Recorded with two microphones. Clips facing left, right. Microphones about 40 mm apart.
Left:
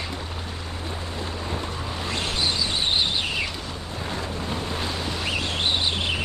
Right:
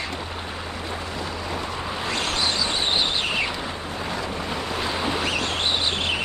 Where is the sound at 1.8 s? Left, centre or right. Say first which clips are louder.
Right 3 dB; right.